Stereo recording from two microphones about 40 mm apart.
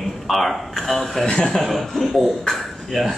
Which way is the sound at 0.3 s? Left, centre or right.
Centre.